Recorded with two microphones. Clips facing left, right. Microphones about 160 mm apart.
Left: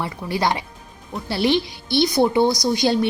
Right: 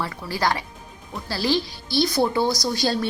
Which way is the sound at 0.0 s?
20° left (ahead or behind).